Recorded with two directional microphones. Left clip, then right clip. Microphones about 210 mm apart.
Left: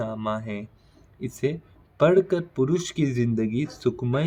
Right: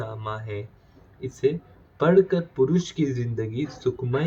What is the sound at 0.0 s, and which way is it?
Speech, 55° left (ahead or behind).